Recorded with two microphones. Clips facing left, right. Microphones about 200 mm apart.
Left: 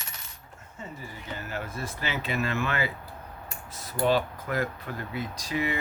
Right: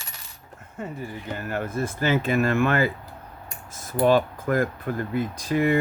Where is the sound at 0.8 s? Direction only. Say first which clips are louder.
Right 8 dB; 55° right (ahead or behind).